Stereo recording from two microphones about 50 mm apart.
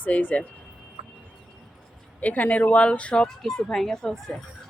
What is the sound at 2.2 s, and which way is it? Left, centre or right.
Speech, left.